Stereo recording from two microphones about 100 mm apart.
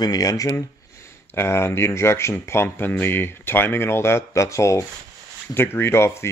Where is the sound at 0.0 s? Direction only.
40° left (ahead or behind).